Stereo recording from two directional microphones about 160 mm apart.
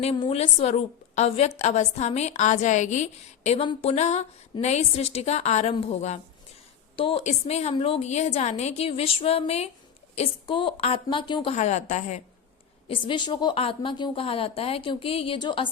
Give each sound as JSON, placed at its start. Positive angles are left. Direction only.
{"t": 0.2, "sound": "a woman's voice", "side_deg": 40}
{"t": 11.5, "sound": "a woman's voice", "side_deg": 45}
{"t": 12.9, "sound": "a woman's voice", "side_deg": 30}